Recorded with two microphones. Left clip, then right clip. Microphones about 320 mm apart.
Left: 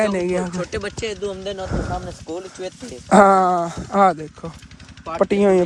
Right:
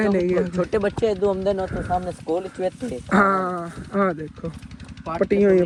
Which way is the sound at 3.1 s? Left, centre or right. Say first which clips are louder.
Left 7 dB; centre.